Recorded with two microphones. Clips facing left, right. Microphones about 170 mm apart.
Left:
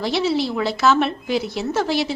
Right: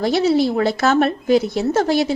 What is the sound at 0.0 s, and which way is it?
A woman's voice, 45° right (ahead or behind).